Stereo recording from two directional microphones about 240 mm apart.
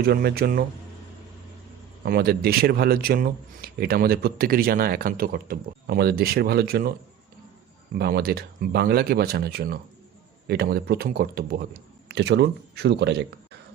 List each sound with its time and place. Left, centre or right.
0.0 s a man's voice: right
2.0 s a man's voice: right
7.9 s a man's voice: right